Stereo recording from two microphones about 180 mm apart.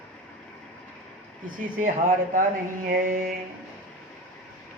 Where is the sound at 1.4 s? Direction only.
50° right (ahead or behind).